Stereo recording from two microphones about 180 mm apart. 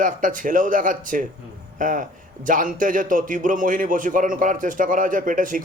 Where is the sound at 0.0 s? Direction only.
50° right (ahead or behind).